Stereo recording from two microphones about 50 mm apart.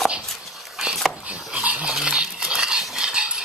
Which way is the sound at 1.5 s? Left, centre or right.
Right.